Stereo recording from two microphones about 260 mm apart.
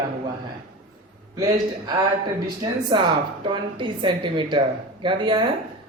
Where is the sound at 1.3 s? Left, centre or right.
Centre.